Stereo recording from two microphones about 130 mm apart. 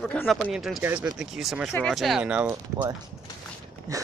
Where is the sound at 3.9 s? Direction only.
25° right (ahead or behind).